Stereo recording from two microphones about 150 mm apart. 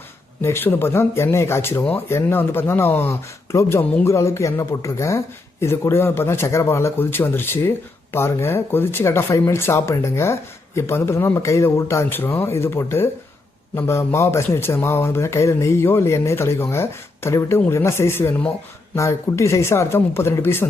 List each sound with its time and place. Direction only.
0.4 s speech: 15° left (ahead or behind)